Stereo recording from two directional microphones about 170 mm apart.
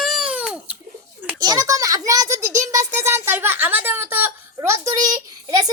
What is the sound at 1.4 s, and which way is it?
A child's voice, 20° right (ahead or behind).